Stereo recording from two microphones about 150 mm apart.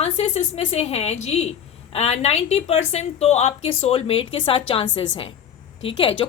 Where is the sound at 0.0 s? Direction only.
45° left (ahead or behind).